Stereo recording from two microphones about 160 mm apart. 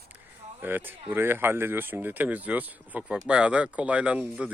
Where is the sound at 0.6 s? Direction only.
10° right (ahead or behind).